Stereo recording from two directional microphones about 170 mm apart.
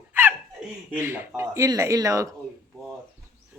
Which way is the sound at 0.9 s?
15° right (ahead or behind).